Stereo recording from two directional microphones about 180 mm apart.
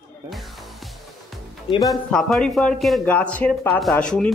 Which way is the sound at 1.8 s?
Centre (ahead or behind).